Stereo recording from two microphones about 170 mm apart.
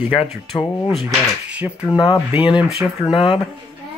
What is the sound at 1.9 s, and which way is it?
Speech, 25° left (ahead or behind).